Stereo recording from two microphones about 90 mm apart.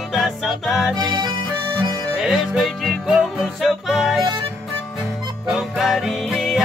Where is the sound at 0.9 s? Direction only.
60° right (ahead or behind).